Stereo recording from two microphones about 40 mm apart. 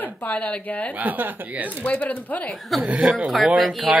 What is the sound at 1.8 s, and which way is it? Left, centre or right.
Speech, left.